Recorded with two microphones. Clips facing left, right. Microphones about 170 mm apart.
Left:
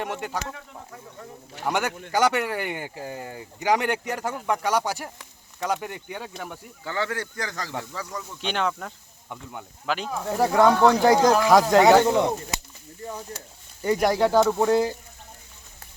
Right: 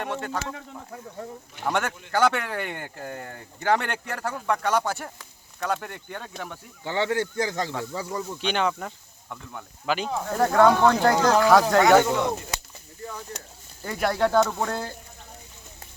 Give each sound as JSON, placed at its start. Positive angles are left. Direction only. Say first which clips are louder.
{"t": 0.0, "sound": "speech", "louder": "even", "side_deg": 10}
{"t": 1.6, "sound": "speech", "louder": "left 1 dB", "side_deg": 10}
{"t": 6.8, "sound": "speech", "louder": "right 4 dB", "side_deg": -25}
{"t": 8.4, "sound": "speech", "louder": "even", "side_deg": 0}
{"t": 9.3, "sound": "speech", "louder": "left 1 dB", "side_deg": 15}
{"t": 9.8, "sound": "speech", "louder": "right 2 dB", "side_deg": 0}
{"t": 10.3, "sound": "speech", "louder": "even", "side_deg": 10}
{"t": 11.8, "sound": "speech", "louder": "left 2 dB", "side_deg": 30}
{"t": 14.0, "sound": "speech", "louder": "left 1 dB", "side_deg": 15}